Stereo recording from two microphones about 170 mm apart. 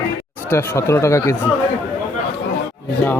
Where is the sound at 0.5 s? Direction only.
15° left (ahead or behind).